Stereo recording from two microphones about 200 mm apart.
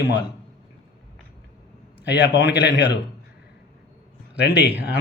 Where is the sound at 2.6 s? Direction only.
60° left (ahead or behind).